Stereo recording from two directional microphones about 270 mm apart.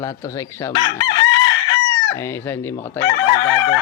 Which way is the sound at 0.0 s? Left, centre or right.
Centre.